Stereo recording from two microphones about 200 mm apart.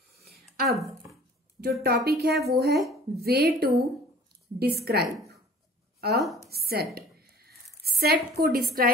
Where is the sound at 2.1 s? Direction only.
50° right (ahead or behind).